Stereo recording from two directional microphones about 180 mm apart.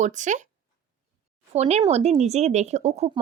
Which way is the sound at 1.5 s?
35° right (ahead or behind).